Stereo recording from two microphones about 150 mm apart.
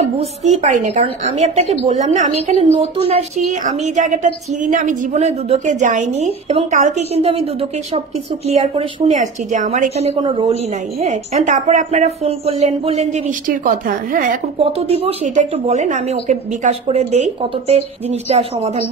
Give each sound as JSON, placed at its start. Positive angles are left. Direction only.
{"t": 0.2, "sound": "a woman's voice", "side_deg": -45}
{"t": 8.5, "sound": "a woman's voice", "side_deg": -45}
{"t": 10.2, "sound": "a woman's voice", "side_deg": -35}
{"t": 11.0, "sound": "a woman's voice", "side_deg": -50}
{"t": 13.5, "sound": "a woman's voice", "side_deg": -65}
{"t": 14.6, "sound": "a woman's voice", "side_deg": -40}